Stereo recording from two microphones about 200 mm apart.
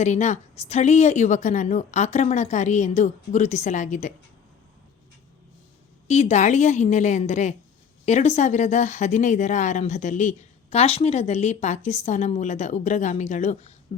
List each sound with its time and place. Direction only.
0.0 s a woman's voice: 35° left (ahead or behind)
6.1 s a woman's voice: 35° left (ahead or behind)